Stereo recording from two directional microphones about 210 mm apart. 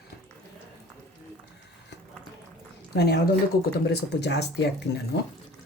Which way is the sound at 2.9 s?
50° left (ahead or behind).